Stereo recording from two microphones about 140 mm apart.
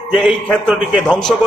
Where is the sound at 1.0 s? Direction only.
5° left (ahead or behind).